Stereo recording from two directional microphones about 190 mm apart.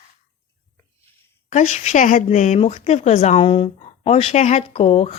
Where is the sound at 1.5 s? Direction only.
40° left (ahead or behind).